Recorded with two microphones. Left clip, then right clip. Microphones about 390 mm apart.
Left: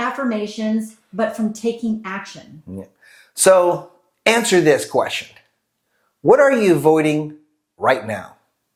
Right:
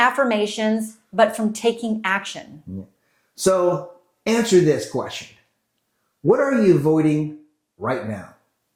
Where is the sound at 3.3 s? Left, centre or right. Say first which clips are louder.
Left 7 dB; left.